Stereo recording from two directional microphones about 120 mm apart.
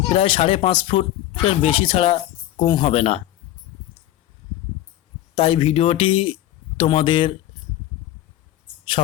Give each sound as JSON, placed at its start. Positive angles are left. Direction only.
{"t": 0.1, "sound": "speech", "side_deg": 50}
{"t": 2.9, "sound": "speech", "side_deg": 60}
{"t": 5.3, "sound": "speech", "side_deg": 50}